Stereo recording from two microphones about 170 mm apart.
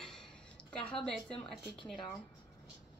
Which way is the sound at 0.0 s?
5° left (ahead or behind).